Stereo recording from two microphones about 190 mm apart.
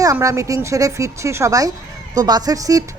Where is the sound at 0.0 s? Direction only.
15° right (ahead or behind).